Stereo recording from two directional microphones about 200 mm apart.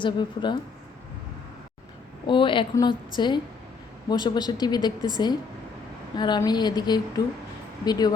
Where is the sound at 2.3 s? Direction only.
25° left (ahead or behind).